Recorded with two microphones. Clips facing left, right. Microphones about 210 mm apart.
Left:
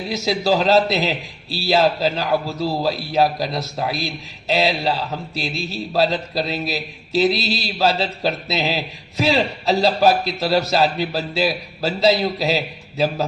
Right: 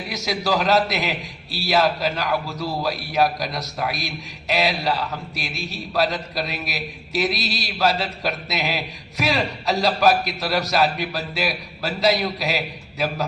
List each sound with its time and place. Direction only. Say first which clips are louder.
0.1 s a man's voice: left 4 dB; 25° left (ahead or behind)